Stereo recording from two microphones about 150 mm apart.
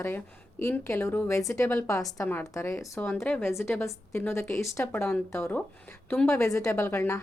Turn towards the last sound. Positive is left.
turn(degrees=15)  # may be behind; listen again after turning